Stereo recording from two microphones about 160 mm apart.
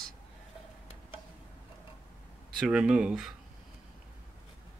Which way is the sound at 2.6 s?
5° right (ahead or behind).